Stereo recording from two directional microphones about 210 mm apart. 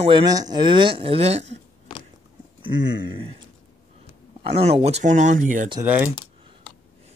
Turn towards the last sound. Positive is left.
turn(degrees=-10)  # may be behind; listen again after turning